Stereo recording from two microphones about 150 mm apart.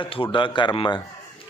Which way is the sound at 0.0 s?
35° left (ahead or behind).